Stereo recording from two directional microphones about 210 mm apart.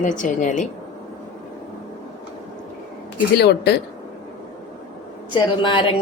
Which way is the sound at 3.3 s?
50° left (ahead or behind).